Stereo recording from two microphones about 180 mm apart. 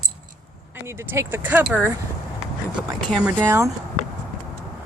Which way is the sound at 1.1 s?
15° right (ahead or behind).